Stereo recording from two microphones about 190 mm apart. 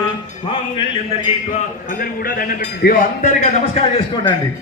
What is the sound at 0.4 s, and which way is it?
A man's voice, 30° left (ahead or behind).